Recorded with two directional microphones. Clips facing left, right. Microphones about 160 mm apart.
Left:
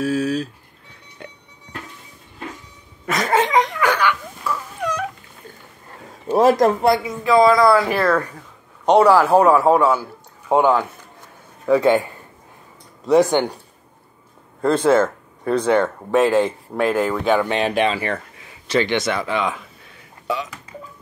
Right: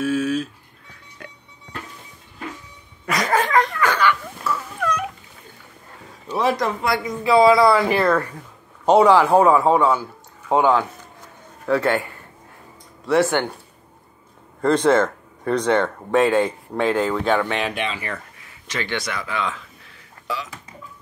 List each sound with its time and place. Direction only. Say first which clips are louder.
0.0 s a sound: left 1 dB; 35° left (ahead or behind)
1.2 s music: left 3 dB; 25° left (ahead or behind)
3.3 s dog: left 2 dB; 20° left (ahead or behind)
6.2 s speech: left 7 dB; 45° left (ahead or behind)
7.2 s a man's voice: even; 10° right (ahead or behind); by 13.5 s 15° left (ahead or behind)
14.6 s speech: left 1 dB; 5° left (ahead or behind)
17.6 s speech: left 7 dB; 35° left (ahead or behind)
18.7 s a man's voice: left 8 dB; 25° left (ahead or behind)